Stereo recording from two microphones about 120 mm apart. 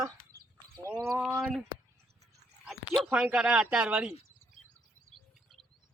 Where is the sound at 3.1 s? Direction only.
10° right (ahead or behind).